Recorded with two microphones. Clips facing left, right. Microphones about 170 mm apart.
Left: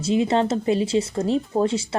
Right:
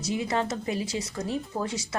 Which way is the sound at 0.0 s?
25° left (ahead or behind).